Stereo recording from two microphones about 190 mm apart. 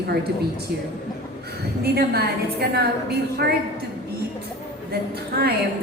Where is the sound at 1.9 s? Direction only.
55° right (ahead or behind).